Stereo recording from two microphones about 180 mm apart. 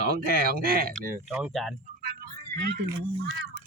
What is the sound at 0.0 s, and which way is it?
Speech, 60° right (ahead or behind).